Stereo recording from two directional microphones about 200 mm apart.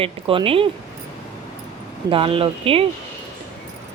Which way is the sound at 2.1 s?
25° right (ahead or behind).